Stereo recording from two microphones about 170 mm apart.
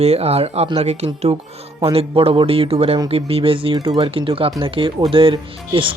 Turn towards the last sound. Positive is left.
turn(degrees=-30)  # may be behind; listen again after turning